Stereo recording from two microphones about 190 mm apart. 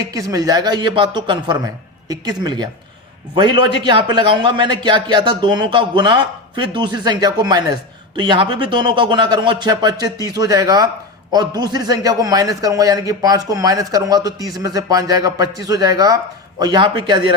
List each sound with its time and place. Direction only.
0.0 s a man's voice: 20° right (ahead or behind)